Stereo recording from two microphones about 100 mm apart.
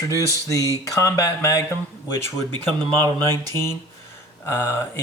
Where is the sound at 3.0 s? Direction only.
45° right (ahead or behind).